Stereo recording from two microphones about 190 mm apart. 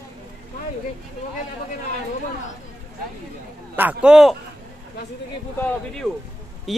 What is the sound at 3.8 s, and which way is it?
Speech, 5° right (ahead or behind).